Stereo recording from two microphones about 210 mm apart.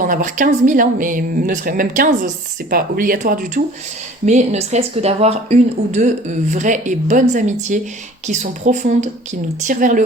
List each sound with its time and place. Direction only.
0.0 s speech: 40° right (ahead or behind)